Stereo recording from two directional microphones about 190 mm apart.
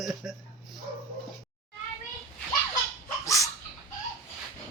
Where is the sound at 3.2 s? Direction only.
15° left (ahead or behind).